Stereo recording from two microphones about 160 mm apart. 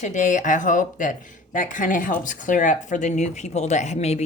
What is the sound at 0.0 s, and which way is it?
Speech, 50° left (ahead or behind).